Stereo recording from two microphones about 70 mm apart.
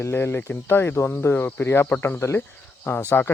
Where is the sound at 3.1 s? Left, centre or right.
Left.